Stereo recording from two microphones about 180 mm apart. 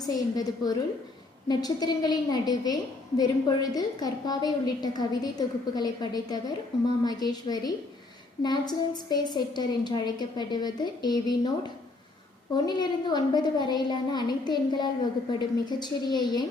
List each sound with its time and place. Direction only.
0.0 s a woman's voice: 20° left (ahead or behind)